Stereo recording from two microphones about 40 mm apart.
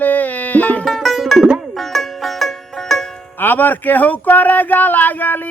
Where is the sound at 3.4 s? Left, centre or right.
Left.